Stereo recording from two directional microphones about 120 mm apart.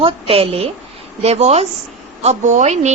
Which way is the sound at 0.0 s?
55° right (ahead or behind).